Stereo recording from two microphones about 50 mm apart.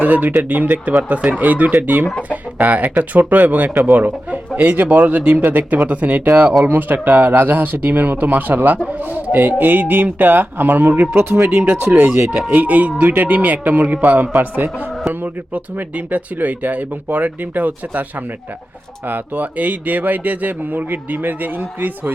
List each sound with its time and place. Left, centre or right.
0.0 s speech: right
11.2 s speech: right
11.6 s speech: right
19.0 s speech: right